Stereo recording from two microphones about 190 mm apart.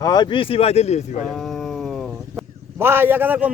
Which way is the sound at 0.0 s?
20° left (ahead or behind).